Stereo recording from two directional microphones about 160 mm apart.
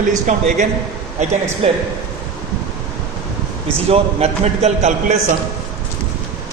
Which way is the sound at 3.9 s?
40° right (ahead or behind).